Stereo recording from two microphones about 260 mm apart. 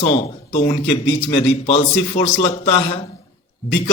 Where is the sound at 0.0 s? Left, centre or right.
Left.